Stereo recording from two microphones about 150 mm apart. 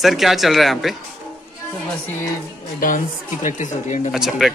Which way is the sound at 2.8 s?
65° left (ahead or behind).